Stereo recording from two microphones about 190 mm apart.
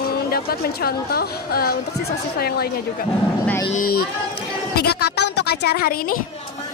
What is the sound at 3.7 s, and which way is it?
A woman's voice, 50° left (ahead or behind).